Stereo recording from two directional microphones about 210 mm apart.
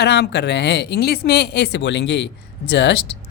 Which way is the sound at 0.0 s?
55° left (ahead or behind).